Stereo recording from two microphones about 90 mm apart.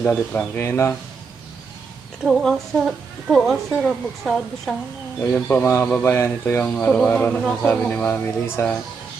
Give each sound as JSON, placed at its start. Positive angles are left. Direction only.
{"t": 0.0, "sound": "speech", "side_deg": 20}
{"t": 2.2, "sound": "a woman's voice", "side_deg": 0}
{"t": 5.2, "sound": "speech", "side_deg": 20}
{"t": 5.6, "sound": "speech", "side_deg": 30}